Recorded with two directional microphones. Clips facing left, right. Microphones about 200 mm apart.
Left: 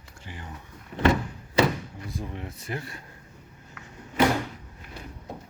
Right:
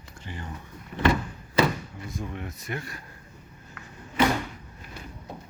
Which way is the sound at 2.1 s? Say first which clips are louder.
Right 1 dB; 30° left (ahead or behind).